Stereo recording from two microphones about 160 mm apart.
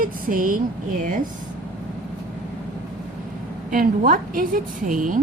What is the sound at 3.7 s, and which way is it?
A woman's voice, 60° right (ahead or behind).